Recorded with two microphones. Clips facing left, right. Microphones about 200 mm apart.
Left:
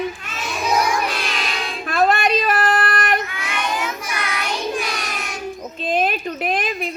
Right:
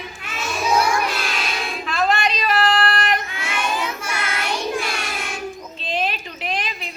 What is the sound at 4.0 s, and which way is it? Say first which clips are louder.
Child singing: even; 15° left (ahead or behind).